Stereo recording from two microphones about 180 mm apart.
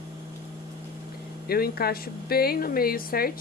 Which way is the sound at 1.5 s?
60° left (ahead or behind).